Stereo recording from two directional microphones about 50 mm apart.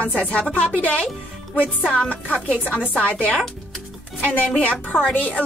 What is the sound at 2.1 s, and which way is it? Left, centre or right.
A woman's voice, left.